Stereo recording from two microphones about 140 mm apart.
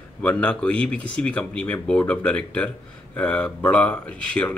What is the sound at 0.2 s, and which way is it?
Speech, 10° left (ahead or behind).